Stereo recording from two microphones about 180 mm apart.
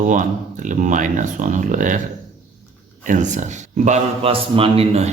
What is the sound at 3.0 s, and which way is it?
A man's voice, 45° right (ahead or behind).